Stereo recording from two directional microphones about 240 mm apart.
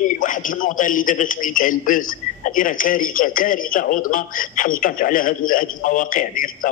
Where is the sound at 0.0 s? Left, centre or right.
Left.